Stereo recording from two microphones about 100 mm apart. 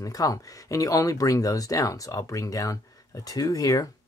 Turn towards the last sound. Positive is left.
turn(degrees=35)  # may be behind; listen again after turning